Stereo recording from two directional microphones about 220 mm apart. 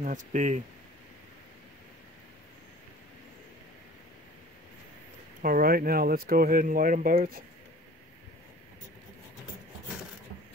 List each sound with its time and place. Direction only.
0.0 s speech: 35° right (ahead or behind)
5.4 s speech: 40° right (ahead or behind)